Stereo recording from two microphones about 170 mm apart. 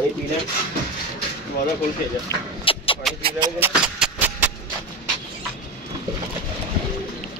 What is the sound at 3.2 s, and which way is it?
Speech, 30° right (ahead or behind).